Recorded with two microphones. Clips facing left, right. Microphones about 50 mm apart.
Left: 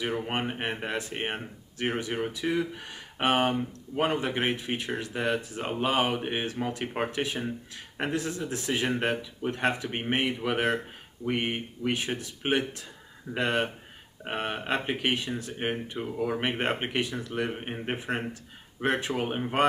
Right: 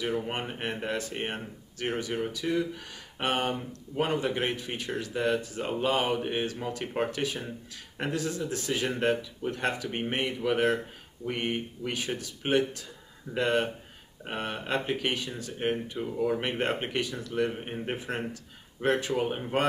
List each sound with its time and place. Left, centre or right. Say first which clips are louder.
0.0 s speech: left 1 dB; centre
9.8 s speech: left 2 dB; left; by 10.9 s centre
11.2 s speech: left 2 dB; centre